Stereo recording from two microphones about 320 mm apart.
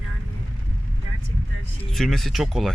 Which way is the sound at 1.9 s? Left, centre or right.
Centre.